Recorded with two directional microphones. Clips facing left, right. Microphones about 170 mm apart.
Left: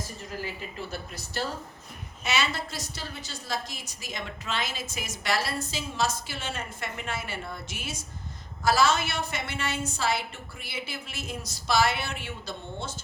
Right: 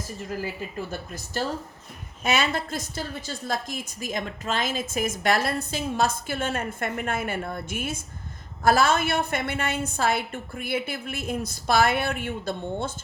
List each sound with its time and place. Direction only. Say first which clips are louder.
0.8 s a woman's voice: right 4 dB; 50° right (ahead or behind)